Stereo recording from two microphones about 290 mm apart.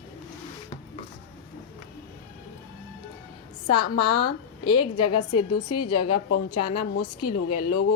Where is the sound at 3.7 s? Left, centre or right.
Left.